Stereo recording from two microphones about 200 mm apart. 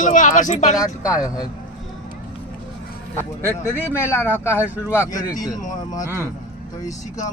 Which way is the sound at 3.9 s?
10° left (ahead or behind).